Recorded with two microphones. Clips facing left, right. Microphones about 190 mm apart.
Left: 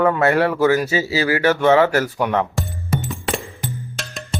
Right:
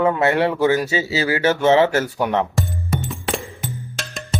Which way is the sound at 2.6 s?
Centre (ahead or behind).